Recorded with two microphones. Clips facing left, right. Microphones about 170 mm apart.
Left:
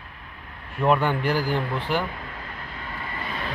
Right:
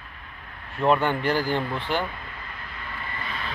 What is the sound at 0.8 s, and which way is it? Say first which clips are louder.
Speech: even; 5° left (ahead or behind).